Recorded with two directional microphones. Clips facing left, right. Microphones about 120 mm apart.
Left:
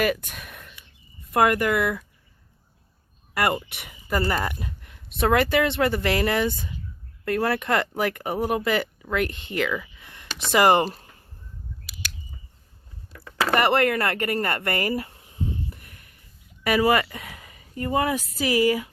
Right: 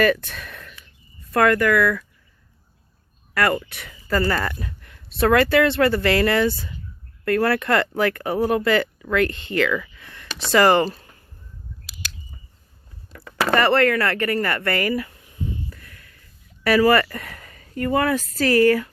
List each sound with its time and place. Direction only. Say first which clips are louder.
0.0 s speech: right 5 dB; 10° left (ahead or behind)
3.3 s speech: right 3 dB; 20° left (ahead or behind)
13.1 s a sound: right 2 dB; 75° right (ahead or behind)
13.6 s speech: right 3 dB; 20° left (ahead or behind)
15.7 s a sound: right 2 dB; 20° left (ahead or behind); by 17.7 s 5° left (ahead or behind)
17.7 s speech: right 3 dB; 20° left (ahead or behind)